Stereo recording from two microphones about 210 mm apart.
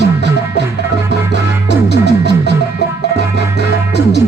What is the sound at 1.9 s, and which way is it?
Music, 50° left (ahead or behind).